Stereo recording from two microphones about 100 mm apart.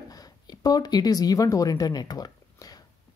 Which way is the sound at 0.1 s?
40° left (ahead or behind).